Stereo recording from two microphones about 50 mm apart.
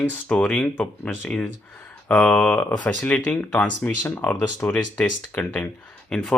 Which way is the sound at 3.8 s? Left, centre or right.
Centre.